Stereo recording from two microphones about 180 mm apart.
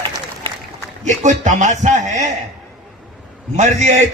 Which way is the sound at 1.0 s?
40° right (ahead or behind).